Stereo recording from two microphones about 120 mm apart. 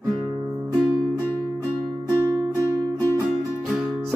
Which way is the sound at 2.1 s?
25° right (ahead or behind).